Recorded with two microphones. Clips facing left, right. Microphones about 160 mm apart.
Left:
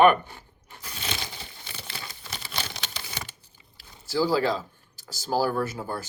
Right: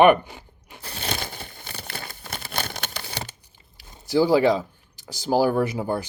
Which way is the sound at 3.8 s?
20° right (ahead or behind).